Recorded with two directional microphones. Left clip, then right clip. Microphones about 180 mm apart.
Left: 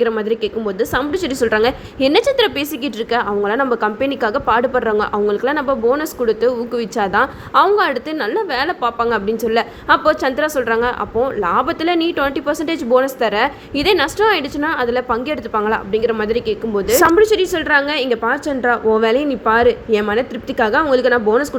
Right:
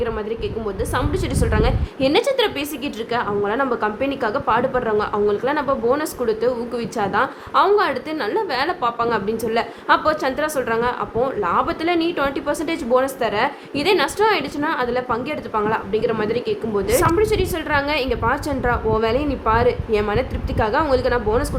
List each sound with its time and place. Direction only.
0.0 s a woman's voice: 25° left (ahead or behind)